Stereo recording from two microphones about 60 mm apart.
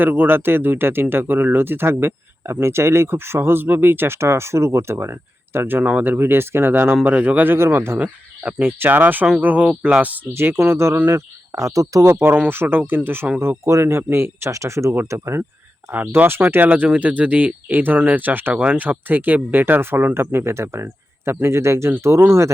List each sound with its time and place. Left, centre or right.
0.0 s speech: right
5.5 s speech: right
6.9 s speech: right
7.9 s speech: right
8.6 s speech: right
10.3 s speech: right
11.5 s speech: right
12.5 s speech: right
13.8 s speech: right
14.5 s speech: right
15.9 s speech: right
16.6 s speech: right